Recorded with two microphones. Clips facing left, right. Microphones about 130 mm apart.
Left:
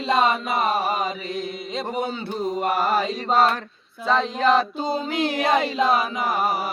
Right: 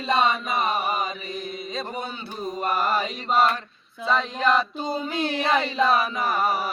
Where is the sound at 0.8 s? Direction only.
35° left (ahead or behind).